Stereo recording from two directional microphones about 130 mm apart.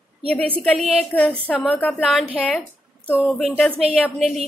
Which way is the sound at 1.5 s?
Centre (ahead or behind).